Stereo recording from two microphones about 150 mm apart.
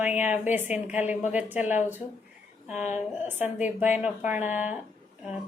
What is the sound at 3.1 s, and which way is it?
A woman's voice, 10° right (ahead or behind).